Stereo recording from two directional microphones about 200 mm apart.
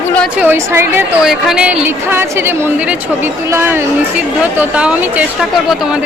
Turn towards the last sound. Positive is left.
turn(degrees=-5)  # may be behind; listen again after turning